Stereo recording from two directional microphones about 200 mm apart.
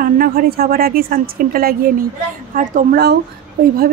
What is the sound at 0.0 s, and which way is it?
Speech, 45° right (ahead or behind).